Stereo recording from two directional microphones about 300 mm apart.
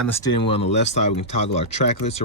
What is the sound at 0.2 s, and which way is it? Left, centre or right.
Speech, centre.